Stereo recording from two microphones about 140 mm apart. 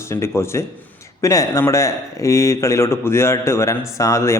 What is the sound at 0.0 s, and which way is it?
Speech, 20° left (ahead or behind).